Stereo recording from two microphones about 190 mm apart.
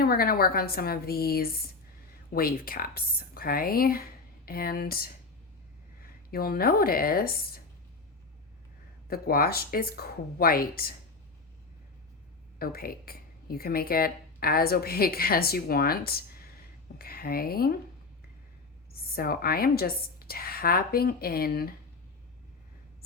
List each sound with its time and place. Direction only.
0.0 s a woman's voice: 50° left (ahead or behind)
9.0 s a woman's voice: 50° left (ahead or behind)
12.5 s a woman's voice: 55° left (ahead or behind)
18.9 s a woman's voice: 50° left (ahead or behind)